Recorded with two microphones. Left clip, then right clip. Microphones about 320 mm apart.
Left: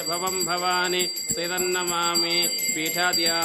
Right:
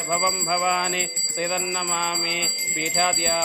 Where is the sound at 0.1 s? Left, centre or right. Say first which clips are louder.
Right 4 dB; centre.